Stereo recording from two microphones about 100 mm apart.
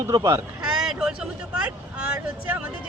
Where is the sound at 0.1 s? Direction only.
35° right (ahead or behind).